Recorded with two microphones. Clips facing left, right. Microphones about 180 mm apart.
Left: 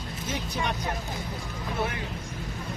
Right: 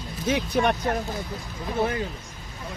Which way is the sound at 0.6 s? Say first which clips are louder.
Right 9 dB; 60° right (ahead or behind).